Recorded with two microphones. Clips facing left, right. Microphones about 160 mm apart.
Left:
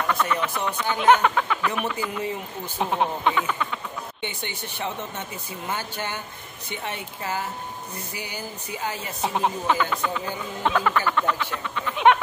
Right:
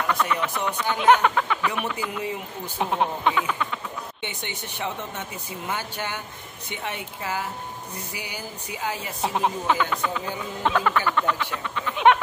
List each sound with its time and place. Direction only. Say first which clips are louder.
0.0 s speech: even; centre (ahead or behind)
4.2 s speech: left 1 dB; 20° right (ahead or behind)
9.2 s speech: even; centre (ahead or behind)